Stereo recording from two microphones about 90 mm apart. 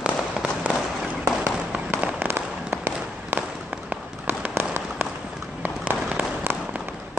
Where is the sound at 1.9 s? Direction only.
20° right (ahead or behind).